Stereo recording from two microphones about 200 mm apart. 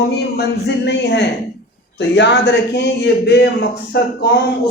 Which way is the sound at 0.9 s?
60° left (ahead or behind).